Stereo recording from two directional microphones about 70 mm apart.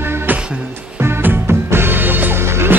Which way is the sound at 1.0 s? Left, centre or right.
Right.